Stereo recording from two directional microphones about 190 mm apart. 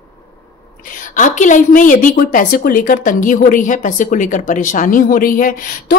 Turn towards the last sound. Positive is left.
turn(degrees=45)  # may be behind; listen again after turning